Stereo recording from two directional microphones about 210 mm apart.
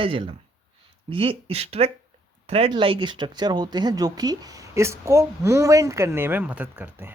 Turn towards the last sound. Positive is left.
turn(degrees=-10)  # may be behind; listen again after turning